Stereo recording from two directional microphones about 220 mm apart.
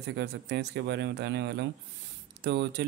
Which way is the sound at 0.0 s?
50° right (ahead or behind).